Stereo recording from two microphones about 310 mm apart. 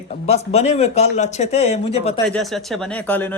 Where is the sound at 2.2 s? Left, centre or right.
Centre.